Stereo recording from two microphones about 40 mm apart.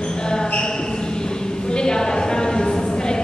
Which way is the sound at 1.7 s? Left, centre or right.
Centre.